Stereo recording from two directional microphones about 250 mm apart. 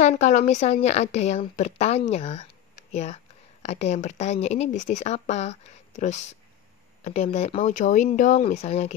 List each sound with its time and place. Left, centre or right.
0.0 s speech: left